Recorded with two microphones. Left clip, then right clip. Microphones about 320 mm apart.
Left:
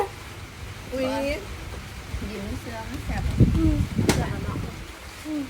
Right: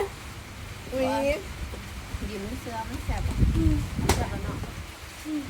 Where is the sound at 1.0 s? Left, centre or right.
Centre.